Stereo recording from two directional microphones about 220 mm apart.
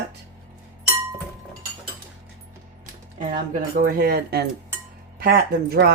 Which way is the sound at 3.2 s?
35° right (ahead or behind).